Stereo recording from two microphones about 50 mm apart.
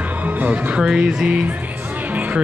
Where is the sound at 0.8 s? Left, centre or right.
Centre.